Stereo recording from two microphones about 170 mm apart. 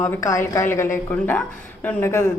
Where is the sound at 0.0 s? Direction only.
15° left (ahead or behind).